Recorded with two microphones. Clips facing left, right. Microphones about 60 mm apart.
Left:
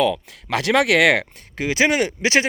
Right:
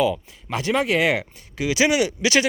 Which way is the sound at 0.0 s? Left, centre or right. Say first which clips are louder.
Left 2 dB; left.